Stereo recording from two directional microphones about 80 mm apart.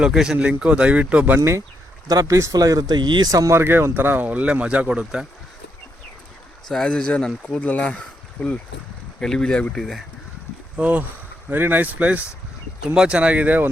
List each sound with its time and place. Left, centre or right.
0.0 s speech: centre
2.0 s speech: right
3.3 s speech: right
3.6 s speech: right
6.7 s speech: centre
10.8 s speech: centre